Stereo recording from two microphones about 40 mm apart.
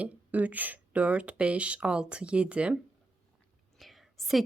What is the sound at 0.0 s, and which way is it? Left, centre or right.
Speech, right.